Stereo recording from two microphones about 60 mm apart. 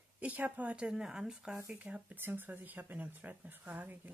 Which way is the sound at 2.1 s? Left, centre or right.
Right.